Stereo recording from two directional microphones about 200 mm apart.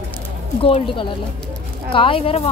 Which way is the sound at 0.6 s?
25° left (ahead or behind).